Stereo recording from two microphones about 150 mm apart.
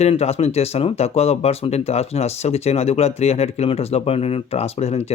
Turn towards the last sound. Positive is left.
turn(degrees=45)  # may be behind; listen again after turning